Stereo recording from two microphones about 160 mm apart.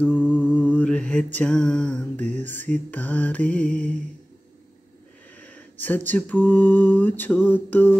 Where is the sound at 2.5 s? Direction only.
10° left (ahead or behind).